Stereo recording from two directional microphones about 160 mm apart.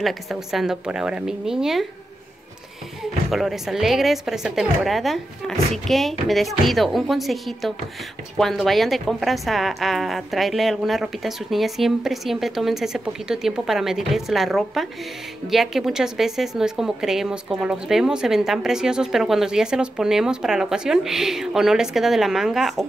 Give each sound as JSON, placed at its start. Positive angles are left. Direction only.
{"t": 0.0, "sound": "a woman's voice", "side_deg": 0}
{"t": 3.3, "sound": "a woman's voice", "side_deg": 0}